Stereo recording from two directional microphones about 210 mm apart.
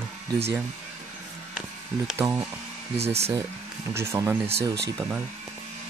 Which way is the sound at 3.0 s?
30° right (ahead or behind).